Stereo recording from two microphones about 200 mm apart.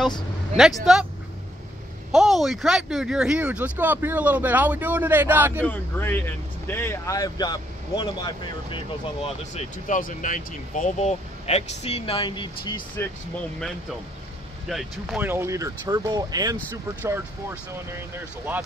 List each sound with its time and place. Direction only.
0.6 s speech: centre (ahead or behind)
2.1 s speech: centre (ahead or behind)
5.6 s speech: 10° left (ahead or behind)
14.7 s speech: centre (ahead or behind); by 16.5 s 20° right (ahead or behind)
17.9 s speech: 10° right (ahead or behind)